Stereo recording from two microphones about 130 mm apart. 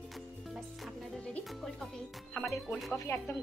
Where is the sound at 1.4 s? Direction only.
Centre (ahead or behind).